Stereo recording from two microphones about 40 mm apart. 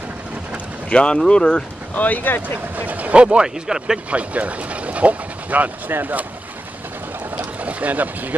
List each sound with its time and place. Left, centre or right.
0.8 s speech: left
2.0 s speech: left
2.4 s speech: right
3.4 s speech: centre
4.1 s speech: right
5.9 s speech: right
7.6 s speech: right